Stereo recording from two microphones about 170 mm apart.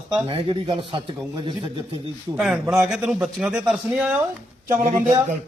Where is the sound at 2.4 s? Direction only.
Centre (ahead or behind).